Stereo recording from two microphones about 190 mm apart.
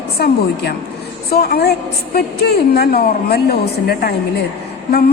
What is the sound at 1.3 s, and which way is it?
A woman's voice, 55° left (ahead or behind).